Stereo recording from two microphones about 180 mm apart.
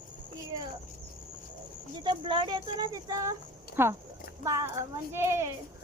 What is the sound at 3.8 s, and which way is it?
Speech, 10° right (ahead or behind).